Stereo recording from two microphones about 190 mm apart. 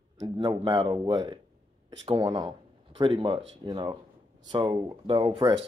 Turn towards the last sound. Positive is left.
turn(degrees=-25)  # may be behind; listen again after turning